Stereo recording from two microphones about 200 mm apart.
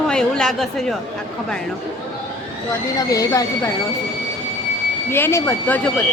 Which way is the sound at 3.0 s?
15° left (ahead or behind).